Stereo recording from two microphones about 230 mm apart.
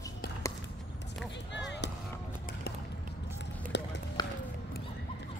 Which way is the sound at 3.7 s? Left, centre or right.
Left.